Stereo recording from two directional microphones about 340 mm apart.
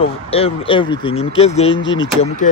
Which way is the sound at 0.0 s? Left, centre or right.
Centre.